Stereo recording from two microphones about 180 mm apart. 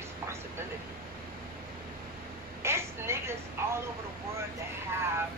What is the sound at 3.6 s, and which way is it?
Vehicle, 15° right (ahead or behind).